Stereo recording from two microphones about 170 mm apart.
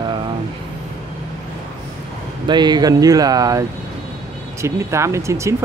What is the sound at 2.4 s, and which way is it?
Speech, 25° right (ahead or behind).